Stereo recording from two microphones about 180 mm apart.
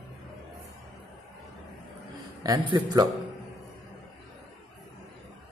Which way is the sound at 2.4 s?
20° right (ahead or behind).